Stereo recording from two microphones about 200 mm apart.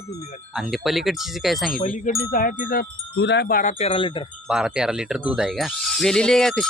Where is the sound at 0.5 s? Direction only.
Centre (ahead or behind).